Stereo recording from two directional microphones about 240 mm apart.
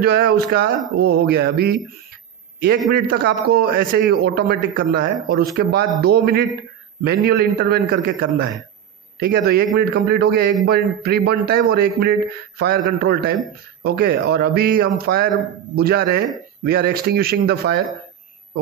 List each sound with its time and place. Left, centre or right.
0.0 s a man's voice: right
2.9 s a man's voice: right